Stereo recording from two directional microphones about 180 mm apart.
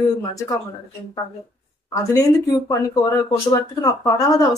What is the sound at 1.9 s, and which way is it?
Speech, 20° left (ahead or behind).